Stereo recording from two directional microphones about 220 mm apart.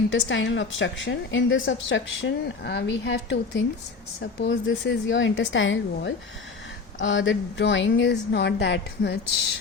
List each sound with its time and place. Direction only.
0.3 s a woman's voice: 60° left (ahead or behind)